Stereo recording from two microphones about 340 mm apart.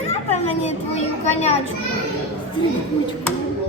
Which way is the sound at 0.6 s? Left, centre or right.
Centre.